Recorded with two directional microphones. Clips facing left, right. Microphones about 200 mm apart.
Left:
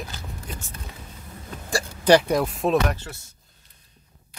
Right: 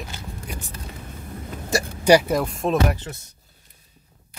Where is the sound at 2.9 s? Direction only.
20° right (ahead or behind).